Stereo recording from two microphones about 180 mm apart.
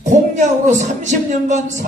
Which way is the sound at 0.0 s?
45° right (ahead or behind).